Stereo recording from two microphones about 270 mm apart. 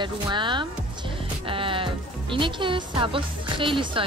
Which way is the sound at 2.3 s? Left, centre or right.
Centre.